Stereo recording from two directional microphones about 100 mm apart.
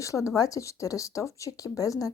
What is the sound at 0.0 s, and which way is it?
Speech, 30° left (ahead or behind).